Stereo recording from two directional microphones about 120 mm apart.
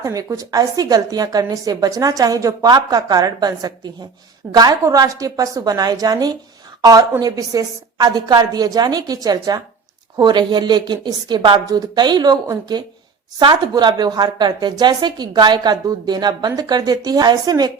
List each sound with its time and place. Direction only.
0.0 s a woman's voice: 30° right (ahead or behind)